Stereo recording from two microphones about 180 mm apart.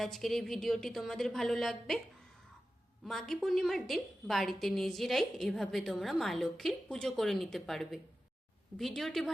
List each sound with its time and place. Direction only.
0.0 s a woman's voice: centre (ahead or behind)
3.0 s a woman's voice: centre (ahead or behind)